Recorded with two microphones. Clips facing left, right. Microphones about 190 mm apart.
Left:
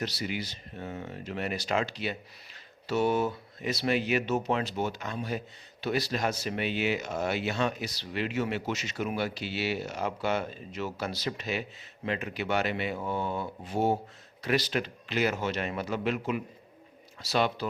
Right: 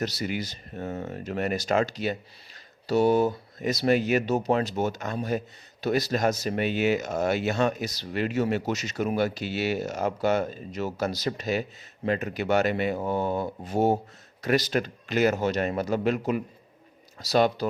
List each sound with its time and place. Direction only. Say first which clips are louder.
0.0 s speech: right 4 dB; 45° right (ahead or behind)